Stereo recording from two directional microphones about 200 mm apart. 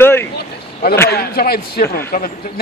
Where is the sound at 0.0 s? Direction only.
10° left (ahead or behind).